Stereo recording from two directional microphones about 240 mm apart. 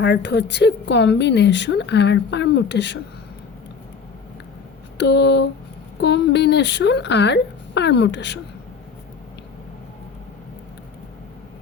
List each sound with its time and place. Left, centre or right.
0.0 s speech: left
4.9 s speech: left